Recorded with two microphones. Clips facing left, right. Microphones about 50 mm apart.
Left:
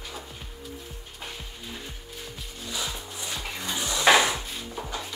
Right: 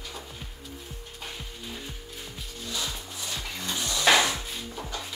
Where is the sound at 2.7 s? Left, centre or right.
Centre.